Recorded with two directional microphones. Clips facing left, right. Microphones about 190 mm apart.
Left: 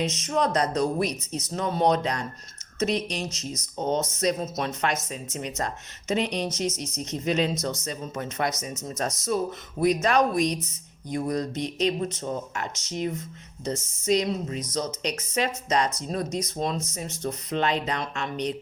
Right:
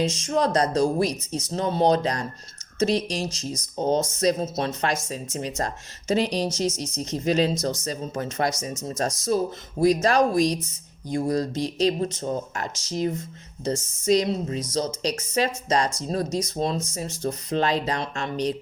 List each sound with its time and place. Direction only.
0.0 s speech: 30° right (ahead or behind)